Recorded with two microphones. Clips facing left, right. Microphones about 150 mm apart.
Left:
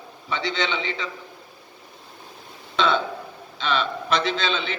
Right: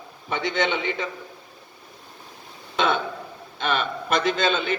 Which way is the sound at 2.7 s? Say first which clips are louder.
Left 1 dB; 50° right (ahead or behind).